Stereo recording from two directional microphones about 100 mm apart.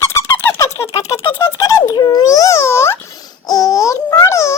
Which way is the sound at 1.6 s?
35° left (ahead or behind).